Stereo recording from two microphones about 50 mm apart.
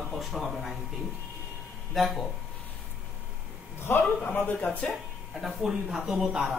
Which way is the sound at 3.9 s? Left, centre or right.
Left.